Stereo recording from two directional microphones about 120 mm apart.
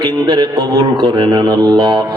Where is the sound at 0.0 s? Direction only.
35° right (ahead or behind).